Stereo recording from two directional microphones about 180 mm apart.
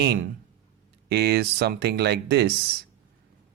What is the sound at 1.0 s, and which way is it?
Speech, 65° right (ahead or behind).